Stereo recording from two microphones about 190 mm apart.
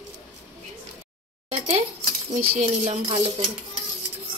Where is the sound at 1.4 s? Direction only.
30° right (ahead or behind).